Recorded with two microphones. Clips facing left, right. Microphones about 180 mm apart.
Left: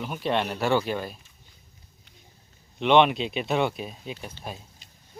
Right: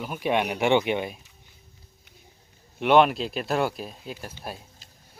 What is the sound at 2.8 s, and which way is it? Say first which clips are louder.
Speech: even; 5° right (ahead or behind).